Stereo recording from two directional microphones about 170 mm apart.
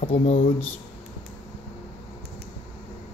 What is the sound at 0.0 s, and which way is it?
Speech, 40° left (ahead or behind).